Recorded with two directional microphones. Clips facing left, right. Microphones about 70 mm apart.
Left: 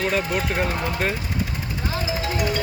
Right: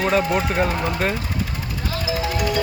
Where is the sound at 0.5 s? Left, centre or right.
Centre.